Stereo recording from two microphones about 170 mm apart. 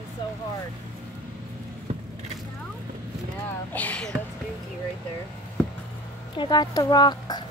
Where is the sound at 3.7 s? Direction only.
10° left (ahead or behind).